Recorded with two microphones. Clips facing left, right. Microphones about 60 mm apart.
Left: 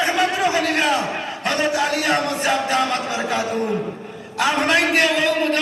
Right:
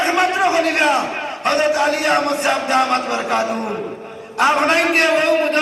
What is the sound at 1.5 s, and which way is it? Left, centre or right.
A man's voice, right.